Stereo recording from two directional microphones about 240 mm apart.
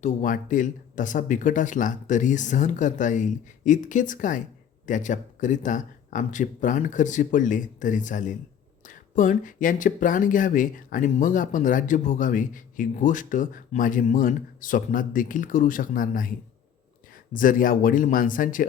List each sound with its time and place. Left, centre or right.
0.0 s speech: left
17.3 s speech: left